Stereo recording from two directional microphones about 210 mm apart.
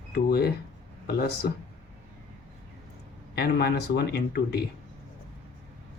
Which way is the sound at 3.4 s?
50° left (ahead or behind).